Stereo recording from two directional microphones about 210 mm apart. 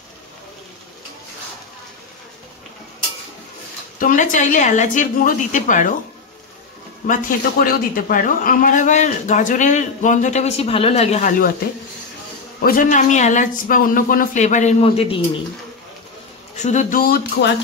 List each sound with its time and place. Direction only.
4.0 s speech: 40° left (ahead or behind)
7.1 s speech: 40° left (ahead or behind)
12.5 s speech: 45° left (ahead or behind); by 15.4 s 25° left (ahead or behind)
16.5 s speech: 35° left (ahead or behind)